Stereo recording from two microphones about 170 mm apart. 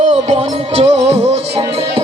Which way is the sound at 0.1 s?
35° right (ahead or behind).